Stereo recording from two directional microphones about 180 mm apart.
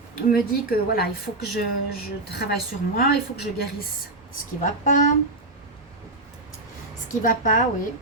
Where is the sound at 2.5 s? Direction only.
55° left (ahead or behind).